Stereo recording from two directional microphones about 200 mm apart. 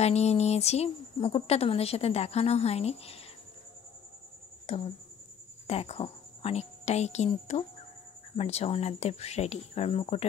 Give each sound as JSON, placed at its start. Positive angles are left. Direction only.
{"t": 0.0, "sound": "a woman's voice", "side_deg": 30}
{"t": 4.7, "sound": "a woman's voice", "side_deg": 30}